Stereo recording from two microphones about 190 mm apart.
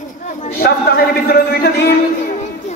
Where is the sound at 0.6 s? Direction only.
55° left (ahead or behind).